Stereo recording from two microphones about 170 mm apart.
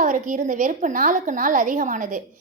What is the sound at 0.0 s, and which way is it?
A woman's voice, 50° right (ahead or behind).